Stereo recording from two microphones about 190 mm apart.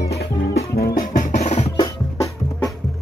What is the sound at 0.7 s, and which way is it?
Music, 50° left (ahead or behind).